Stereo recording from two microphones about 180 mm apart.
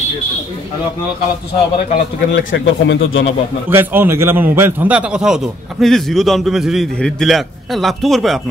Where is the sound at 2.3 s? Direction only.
90° left.